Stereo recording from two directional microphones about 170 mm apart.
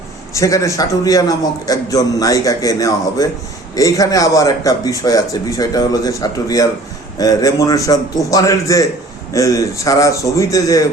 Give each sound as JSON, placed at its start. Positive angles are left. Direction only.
{"t": 0.3, "sound": "a man's voice", "side_deg": 20}